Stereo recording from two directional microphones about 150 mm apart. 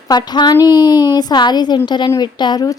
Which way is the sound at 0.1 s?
25° left (ahead or behind).